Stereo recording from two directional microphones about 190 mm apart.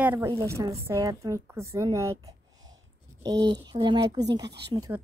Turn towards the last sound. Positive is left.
turn(degrees=-15)  # may be behind; listen again after turning